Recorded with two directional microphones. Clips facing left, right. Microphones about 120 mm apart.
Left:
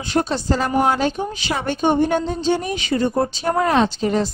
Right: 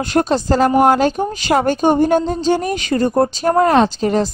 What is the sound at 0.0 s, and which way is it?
A woman's voice, 50° right (ahead or behind).